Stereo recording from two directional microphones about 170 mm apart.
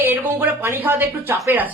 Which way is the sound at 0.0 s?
15° right (ahead or behind).